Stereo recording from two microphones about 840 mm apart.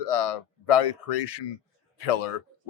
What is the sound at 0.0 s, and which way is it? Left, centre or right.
Speech, left.